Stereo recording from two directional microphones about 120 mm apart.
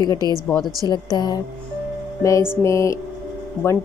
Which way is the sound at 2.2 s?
25° left (ahead or behind).